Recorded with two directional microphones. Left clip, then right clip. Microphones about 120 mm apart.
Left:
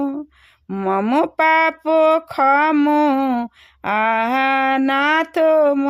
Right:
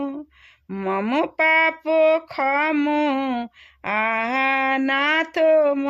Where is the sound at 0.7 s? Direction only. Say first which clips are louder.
Left 5 dB; 25° left (ahead or behind).